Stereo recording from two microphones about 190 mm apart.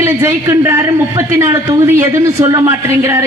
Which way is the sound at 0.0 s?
15° right (ahead or behind).